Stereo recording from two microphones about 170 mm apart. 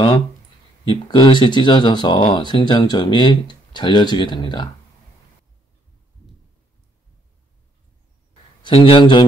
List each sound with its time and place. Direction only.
0.8 s speech: 25° left (ahead or behind)
8.6 s speech: 30° left (ahead or behind)